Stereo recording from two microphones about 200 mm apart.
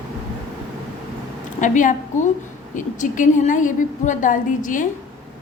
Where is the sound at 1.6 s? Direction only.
40° left (ahead or behind).